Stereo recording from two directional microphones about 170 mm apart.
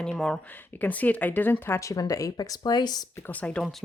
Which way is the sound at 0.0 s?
5° left (ahead or behind).